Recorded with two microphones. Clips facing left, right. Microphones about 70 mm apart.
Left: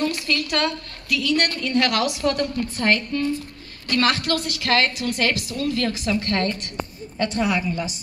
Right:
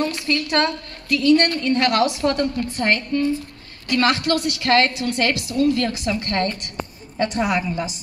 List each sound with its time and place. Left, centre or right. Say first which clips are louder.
0.3 s a woman's voice: right 3 dB; right